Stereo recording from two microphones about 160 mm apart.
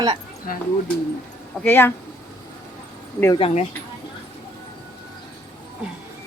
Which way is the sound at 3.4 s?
40° left (ahead or behind).